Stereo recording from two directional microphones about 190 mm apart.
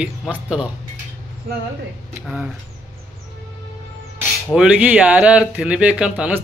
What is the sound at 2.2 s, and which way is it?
Speech, centre (ahead or behind).